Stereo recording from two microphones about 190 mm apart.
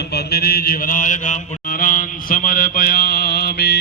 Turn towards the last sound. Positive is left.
turn(degrees=55)  # may be behind; listen again after turning